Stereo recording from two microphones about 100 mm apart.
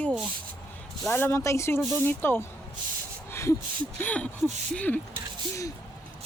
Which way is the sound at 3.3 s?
30° left (ahead or behind).